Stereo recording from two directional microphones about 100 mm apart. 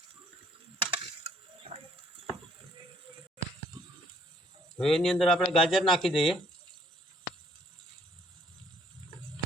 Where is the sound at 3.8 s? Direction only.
45° right (ahead or behind).